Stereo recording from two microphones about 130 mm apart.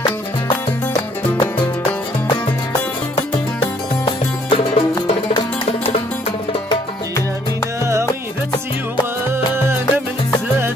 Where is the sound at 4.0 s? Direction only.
40° left (ahead or behind).